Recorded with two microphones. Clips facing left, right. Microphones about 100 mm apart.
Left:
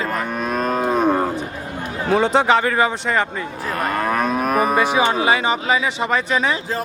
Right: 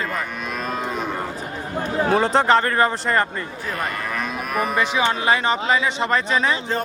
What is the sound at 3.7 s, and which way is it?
Moo, 45° left (ahead or behind).